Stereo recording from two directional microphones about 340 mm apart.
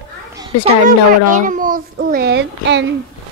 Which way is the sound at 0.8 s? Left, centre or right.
Right.